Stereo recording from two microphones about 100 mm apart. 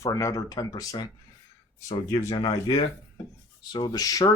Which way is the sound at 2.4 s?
65° left (ahead or behind).